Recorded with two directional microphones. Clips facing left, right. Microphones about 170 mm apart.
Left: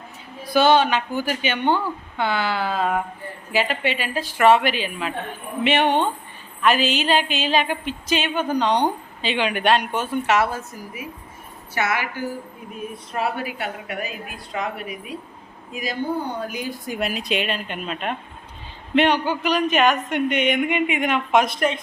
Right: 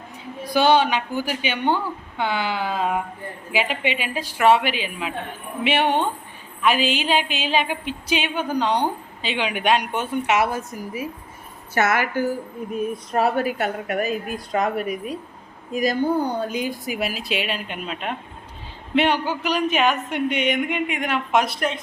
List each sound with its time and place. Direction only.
0.5 s a woman's voice: 15° right (ahead or behind)
11.7 s a woman's voice: 45° right (ahead or behind)
16.4 s a woman's voice: 20° right (ahead or behind); by 21.4 s centre (ahead or behind)